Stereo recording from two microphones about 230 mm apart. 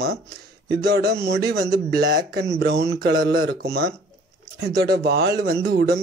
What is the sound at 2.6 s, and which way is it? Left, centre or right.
Speech, right.